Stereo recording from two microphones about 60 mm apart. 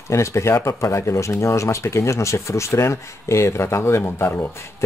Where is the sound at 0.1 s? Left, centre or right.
Left.